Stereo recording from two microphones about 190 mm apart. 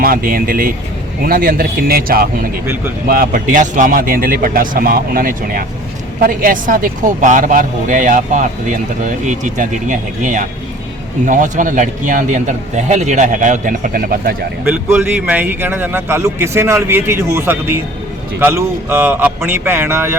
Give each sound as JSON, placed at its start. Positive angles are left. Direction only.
{"t": 0.0, "sound": "a man's voice", "side_deg": -50}
{"t": 14.6, "sound": "a man's voice", "side_deg": -10}